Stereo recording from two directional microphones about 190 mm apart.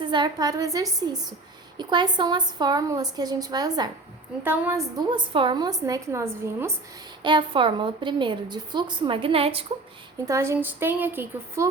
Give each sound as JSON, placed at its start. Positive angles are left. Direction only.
{"t": 0.0, "sound": "a woman's voice", "side_deg": -25}
{"t": 7.2, "sound": "a woman's voice", "side_deg": -25}
{"t": 10.2, "sound": "a woman's voice", "side_deg": -15}